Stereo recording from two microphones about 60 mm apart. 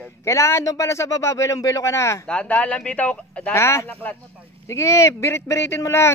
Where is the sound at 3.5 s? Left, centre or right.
Left.